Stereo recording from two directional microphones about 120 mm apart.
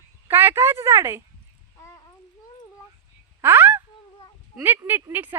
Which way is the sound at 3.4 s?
20° right (ahead or behind).